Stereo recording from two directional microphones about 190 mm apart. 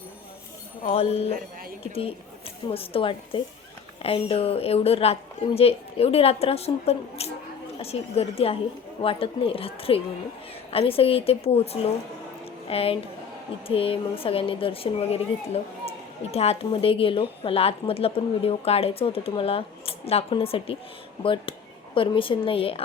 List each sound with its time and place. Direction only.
0.8 s a woman's voice: 30° left (ahead or behind)
2.7 s a woman's voice: 30° left (ahead or behind)
21.9 s speech: 25° left (ahead or behind)